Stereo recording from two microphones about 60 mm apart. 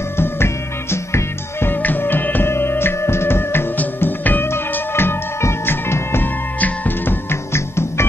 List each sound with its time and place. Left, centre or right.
0.2 s music: left
1.7 s music: left
3.7 s music: left